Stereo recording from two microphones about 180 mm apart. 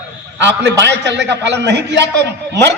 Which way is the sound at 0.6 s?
75° right (ahead or behind).